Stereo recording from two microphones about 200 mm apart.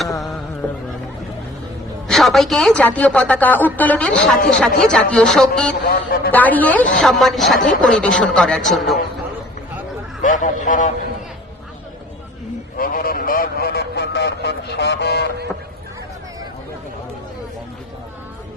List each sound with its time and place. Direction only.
2.0 s a woman's voice: centre (ahead or behind)
5.8 s a man's voice: 50° left (ahead or behind)
6.3 s a woman's voice: 10° left (ahead or behind)
10.2 s speech: 40° left (ahead or behind)
12.7 s speech: 45° left (ahead or behind)